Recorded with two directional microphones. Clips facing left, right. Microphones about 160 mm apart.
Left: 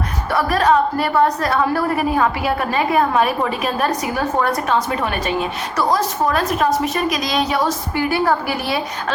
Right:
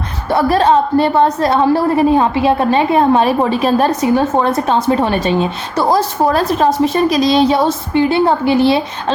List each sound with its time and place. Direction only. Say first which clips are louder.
0.3 s a woman's voice: right 5 dB; 30° right (ahead or behind)